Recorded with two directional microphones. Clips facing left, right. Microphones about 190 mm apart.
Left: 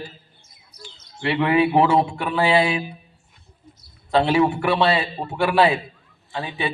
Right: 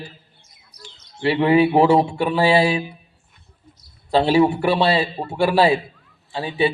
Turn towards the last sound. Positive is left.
turn(degrees=-30)  # may be behind; listen again after turning